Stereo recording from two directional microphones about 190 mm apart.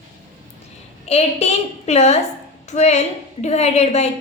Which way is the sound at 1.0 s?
35° left (ahead or behind).